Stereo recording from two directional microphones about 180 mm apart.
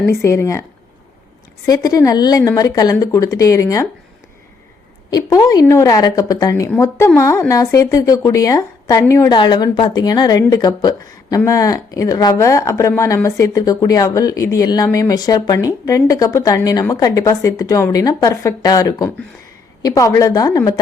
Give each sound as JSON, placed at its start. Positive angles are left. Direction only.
{"t": 0.0, "sound": "speech", "side_deg": 15}
{"t": 1.6, "sound": "a woman's voice", "side_deg": 20}
{"t": 5.1, "sound": "a woman's voice", "side_deg": 20}